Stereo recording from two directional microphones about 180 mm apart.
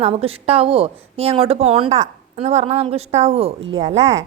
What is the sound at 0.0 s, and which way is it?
A woman's voice, 35° right (ahead or behind).